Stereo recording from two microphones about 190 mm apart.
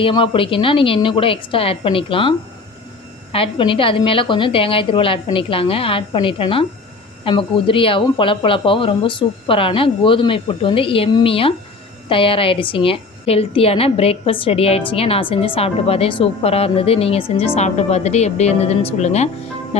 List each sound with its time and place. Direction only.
0.0 s speech: 25° left (ahead or behind)
3.3 s a woman's voice: 30° left (ahead or behind)